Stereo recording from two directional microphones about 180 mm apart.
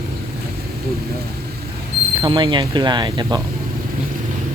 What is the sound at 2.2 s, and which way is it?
Speech, 25° right (ahead or behind).